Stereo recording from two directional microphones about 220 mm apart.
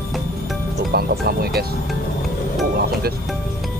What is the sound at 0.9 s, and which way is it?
Music, 45° right (ahead or behind).